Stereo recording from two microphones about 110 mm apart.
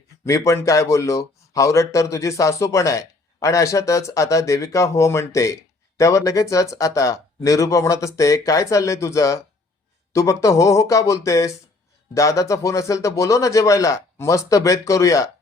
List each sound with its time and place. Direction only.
0.3 s speech: 30° left (ahead or behind)